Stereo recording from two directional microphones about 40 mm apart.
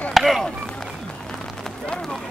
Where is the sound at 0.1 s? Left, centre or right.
Centre.